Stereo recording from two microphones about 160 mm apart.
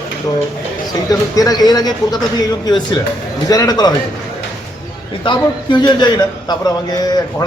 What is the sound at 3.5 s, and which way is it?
Speech, 20° left (ahead or behind).